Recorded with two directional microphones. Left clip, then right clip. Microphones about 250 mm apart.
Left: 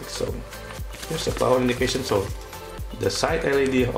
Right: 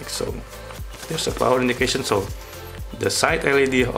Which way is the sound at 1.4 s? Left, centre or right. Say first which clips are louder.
Right 2 dB; centre.